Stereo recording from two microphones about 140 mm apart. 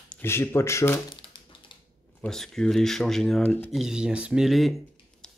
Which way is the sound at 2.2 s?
5° left (ahead or behind).